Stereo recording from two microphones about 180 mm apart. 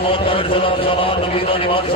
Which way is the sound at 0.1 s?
30° left (ahead or behind).